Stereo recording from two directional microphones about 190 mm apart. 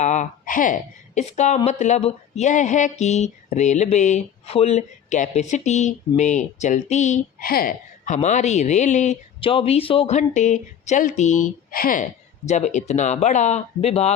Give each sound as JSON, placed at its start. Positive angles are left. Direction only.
{"t": 0.0, "sound": "speech", "side_deg": 40}